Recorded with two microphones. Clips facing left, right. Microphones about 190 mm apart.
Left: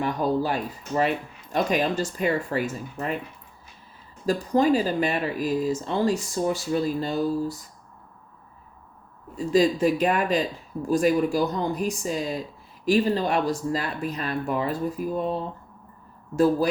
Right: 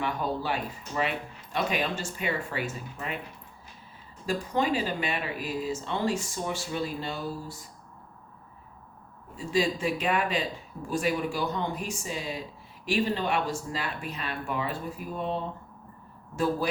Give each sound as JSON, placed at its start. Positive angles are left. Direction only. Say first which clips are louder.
{"t": 0.0, "sound": "speech", "louder": "left 6 dB", "side_deg": 40}
{"t": 4.3, "sound": "speech", "louder": "left 7 dB", "side_deg": 40}
{"t": 9.5, "sound": "speech", "louder": "left 7 dB", "side_deg": 40}
{"t": 16.3, "sound": "speech", "louder": "left 7 dB", "side_deg": 40}